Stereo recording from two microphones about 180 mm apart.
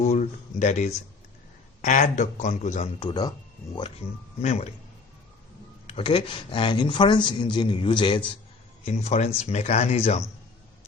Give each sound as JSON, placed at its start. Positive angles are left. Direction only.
{"t": 0.0, "sound": "speech", "side_deg": 40}
{"t": 3.0, "sound": "speech", "side_deg": 25}
{"t": 4.4, "sound": "speech", "side_deg": 40}
{"t": 5.9, "sound": "speech", "side_deg": 30}
{"t": 8.8, "sound": "speech", "side_deg": 40}